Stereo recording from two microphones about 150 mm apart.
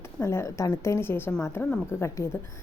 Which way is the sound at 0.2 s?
15° left (ahead or behind).